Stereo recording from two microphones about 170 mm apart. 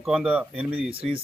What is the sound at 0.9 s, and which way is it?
Speech, 35° right (ahead or behind).